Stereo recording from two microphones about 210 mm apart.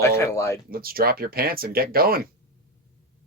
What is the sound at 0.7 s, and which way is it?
Speech, 45° right (ahead or behind).